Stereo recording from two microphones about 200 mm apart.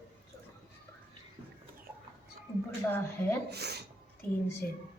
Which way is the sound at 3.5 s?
55° right (ahead or behind).